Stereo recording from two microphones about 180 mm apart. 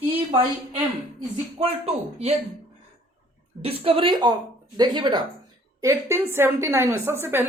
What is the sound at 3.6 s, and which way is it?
A woman's voice, 30° right (ahead or behind).